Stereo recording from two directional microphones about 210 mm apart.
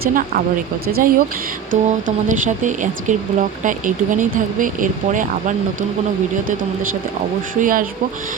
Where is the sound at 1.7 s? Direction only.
35° right (ahead or behind).